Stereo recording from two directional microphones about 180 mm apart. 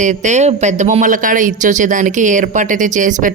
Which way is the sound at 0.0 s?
40° right (ahead or behind).